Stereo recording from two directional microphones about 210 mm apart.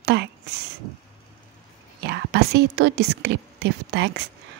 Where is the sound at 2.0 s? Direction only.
50° right (ahead or behind).